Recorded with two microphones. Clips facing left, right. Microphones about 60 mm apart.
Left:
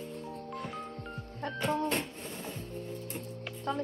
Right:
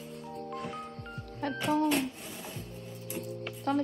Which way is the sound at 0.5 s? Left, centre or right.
Centre.